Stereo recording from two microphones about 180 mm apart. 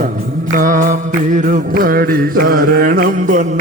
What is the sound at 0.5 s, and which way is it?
Mantra, 45° right (ahead or behind).